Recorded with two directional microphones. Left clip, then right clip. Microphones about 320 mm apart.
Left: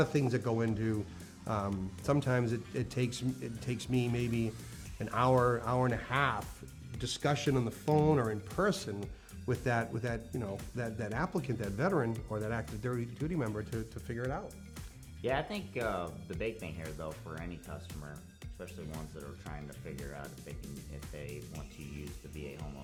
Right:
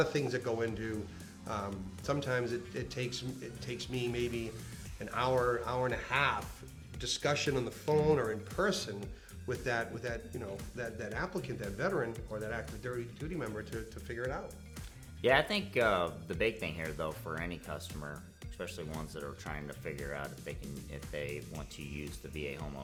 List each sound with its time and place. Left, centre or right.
0.0 s speech: left
2.0 s speech: left
15.2 s speech: centre